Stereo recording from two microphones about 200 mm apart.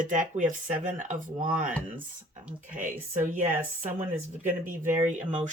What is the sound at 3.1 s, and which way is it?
Speech, 40° right (ahead or behind).